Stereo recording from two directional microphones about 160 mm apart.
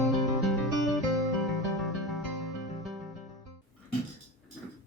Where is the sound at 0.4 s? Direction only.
Centre (ahead or behind).